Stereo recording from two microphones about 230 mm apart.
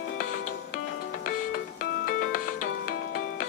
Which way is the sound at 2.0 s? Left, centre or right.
Left.